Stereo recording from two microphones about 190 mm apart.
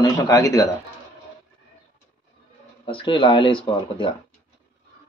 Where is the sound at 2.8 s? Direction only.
25° left (ahead or behind).